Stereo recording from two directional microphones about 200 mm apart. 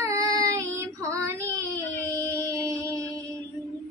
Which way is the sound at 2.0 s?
10° left (ahead or behind).